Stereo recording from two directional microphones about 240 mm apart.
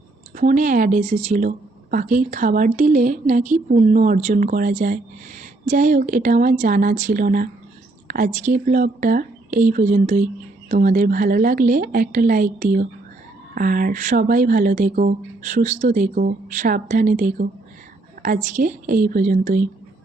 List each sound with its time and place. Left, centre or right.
0.3 s speech: right